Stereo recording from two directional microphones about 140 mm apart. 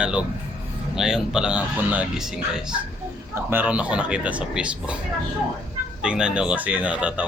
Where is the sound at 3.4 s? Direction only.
10° right (ahead or behind).